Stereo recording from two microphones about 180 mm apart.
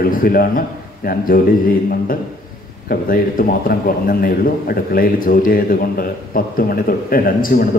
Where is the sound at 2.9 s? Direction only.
55° left (ahead or behind).